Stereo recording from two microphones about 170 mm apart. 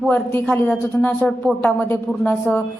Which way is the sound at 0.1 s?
10° left (ahead or behind).